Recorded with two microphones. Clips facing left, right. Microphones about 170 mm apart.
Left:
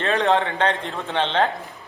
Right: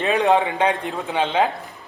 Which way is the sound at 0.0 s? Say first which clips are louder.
Right 2 dB; 10° right (ahead or behind).